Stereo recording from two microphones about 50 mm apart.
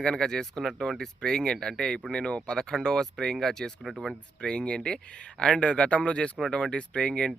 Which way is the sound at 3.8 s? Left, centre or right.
Centre.